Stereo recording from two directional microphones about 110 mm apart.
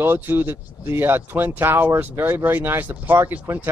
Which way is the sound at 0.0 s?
20° right (ahead or behind).